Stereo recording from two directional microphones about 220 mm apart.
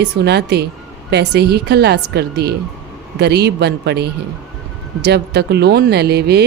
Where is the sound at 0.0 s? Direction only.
50° right (ahead or behind).